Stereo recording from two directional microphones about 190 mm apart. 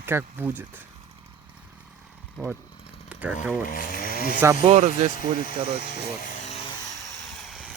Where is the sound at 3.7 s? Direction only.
50° left (ahead or behind).